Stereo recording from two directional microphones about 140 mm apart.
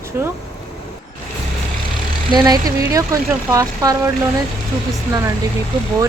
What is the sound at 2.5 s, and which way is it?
Speech, 25° right (ahead or behind).